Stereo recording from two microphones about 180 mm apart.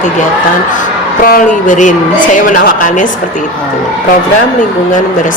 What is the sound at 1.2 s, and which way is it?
A woman's voice, 50° left (ahead or behind).